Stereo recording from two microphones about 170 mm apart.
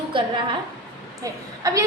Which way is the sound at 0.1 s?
30° right (ahead or behind).